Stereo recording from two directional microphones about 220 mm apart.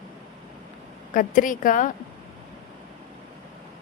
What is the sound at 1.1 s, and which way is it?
Speech, 35° left (ahead or behind).